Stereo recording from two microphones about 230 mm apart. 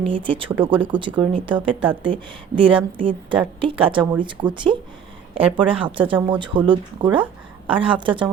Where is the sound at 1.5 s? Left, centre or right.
Right.